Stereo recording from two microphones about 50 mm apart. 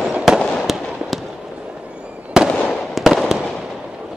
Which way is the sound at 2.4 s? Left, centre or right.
Centre.